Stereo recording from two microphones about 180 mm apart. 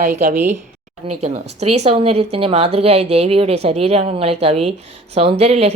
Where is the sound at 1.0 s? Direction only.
35° right (ahead or behind).